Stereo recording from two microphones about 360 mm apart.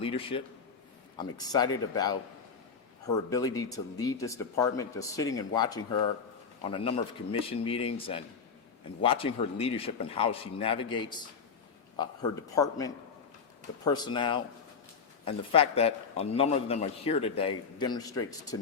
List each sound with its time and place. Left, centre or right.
0.0 s a man's voice: centre
3.2 s a man's voice: centre